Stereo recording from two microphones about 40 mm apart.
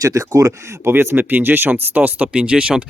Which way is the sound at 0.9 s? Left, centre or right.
Right.